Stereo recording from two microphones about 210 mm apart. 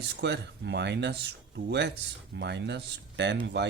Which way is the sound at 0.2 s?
55° right (ahead or behind).